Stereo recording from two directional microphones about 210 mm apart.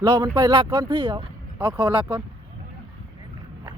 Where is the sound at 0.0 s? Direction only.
20° right (ahead or behind).